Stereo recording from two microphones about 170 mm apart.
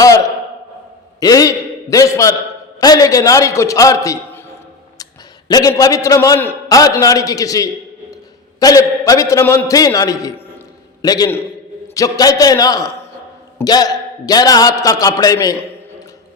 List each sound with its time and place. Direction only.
0.0 s a sound: 20° left (ahead or behind)
1.2 s a man's voice: 20° left (ahead or behind)
5.5 s a man's voice: 20° left (ahead or behind)